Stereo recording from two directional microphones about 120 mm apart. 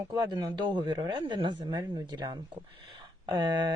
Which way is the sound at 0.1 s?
35° right (ahead or behind).